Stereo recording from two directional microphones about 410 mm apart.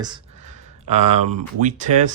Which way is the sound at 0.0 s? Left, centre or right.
Centre.